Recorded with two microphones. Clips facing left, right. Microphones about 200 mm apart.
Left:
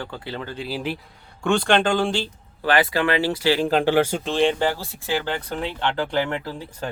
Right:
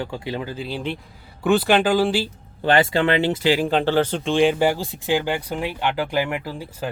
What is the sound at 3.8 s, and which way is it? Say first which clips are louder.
Speech: even; 10° left (ahead or behind).